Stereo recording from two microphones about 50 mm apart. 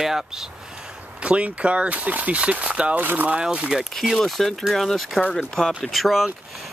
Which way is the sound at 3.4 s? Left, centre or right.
Centre.